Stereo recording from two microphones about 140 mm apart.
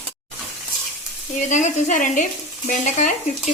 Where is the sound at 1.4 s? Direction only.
60° left (ahead or behind).